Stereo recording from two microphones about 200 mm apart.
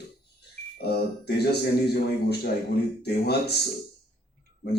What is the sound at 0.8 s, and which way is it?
A man's voice, 55° left (ahead or behind).